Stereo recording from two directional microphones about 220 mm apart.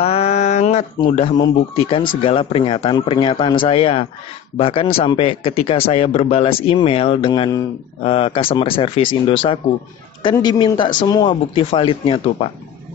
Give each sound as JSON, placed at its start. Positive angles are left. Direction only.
{"t": 0.0, "sound": "a man's voice", "side_deg": 25}